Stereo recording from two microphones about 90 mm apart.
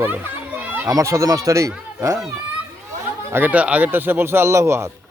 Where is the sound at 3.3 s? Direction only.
20° right (ahead or behind).